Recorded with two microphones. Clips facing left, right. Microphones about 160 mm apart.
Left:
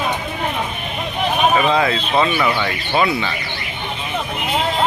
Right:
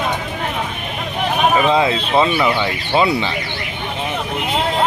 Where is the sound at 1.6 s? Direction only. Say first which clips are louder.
Right 2 dB; 20° right (ahead or behind).